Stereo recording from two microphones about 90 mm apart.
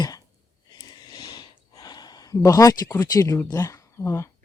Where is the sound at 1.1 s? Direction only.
50° left (ahead or behind).